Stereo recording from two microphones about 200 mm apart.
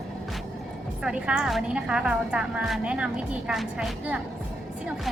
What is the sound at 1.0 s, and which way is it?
Speech, 5° right (ahead or behind).